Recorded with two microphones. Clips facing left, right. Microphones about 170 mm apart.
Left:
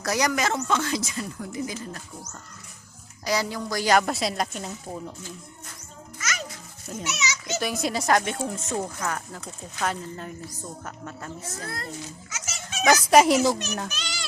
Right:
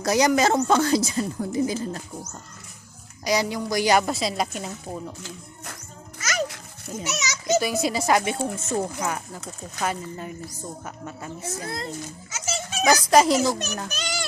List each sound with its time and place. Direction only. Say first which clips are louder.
0.0 s speech: right 5 dB; 25° right (ahead or behind)
3.2 s speech: right 3 dB; 15° right (ahead or behind)
4.0 s speech: right 1 dB; centre (ahead or behind)
6.1 s music: right 5 dB; 35° right (ahead or behind)
7.1 s children playing: right 8 dB; 40° right (ahead or behind)
7.6 s speech: right 3 dB; centre (ahead or behind)
12.3 s children playing: right 6 dB; 30° right (ahead or behind)
12.8 s a child's voice: even; 5° left (ahead or behind)
13.9 s children playing: right 6 dB; 50° right (ahead or behind)